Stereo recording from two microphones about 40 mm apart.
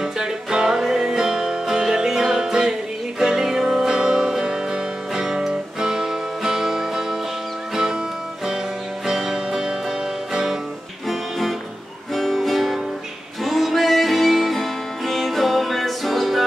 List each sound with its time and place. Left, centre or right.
0.0 s music: centre
9.0 s music: centre
11.1 s music: centre